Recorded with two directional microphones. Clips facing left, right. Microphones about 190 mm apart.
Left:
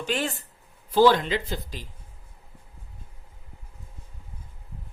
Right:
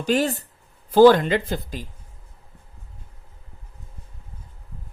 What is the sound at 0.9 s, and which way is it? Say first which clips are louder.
Speech: right 6 dB; 50° right (ahead or behind).